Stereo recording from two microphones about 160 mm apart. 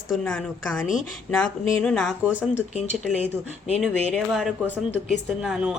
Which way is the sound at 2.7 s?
45° left (ahead or behind).